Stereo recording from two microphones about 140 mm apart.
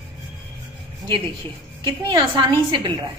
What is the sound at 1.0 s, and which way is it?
A woman's voice, 35° right (ahead or behind).